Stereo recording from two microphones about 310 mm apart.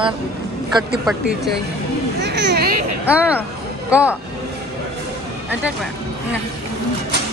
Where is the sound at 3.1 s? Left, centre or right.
Centre.